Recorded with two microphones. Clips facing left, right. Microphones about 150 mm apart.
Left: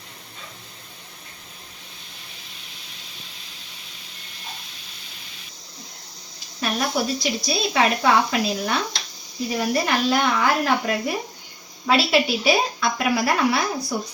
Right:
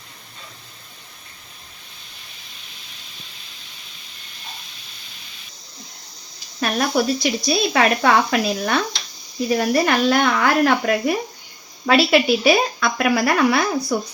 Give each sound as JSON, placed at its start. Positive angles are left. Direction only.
{"t": 6.6, "sound": "speech", "side_deg": -60}